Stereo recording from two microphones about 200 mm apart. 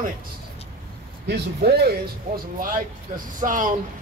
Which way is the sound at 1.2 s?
55° right (ahead or behind).